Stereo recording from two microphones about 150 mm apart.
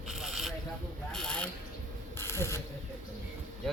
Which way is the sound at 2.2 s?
15° left (ahead or behind).